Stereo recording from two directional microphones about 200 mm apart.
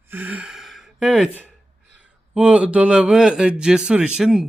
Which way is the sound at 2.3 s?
5° right (ahead or behind).